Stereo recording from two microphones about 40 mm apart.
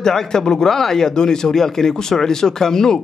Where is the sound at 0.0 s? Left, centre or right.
Centre.